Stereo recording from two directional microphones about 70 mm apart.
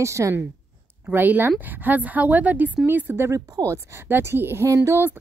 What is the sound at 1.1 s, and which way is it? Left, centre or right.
A woman's voice, right.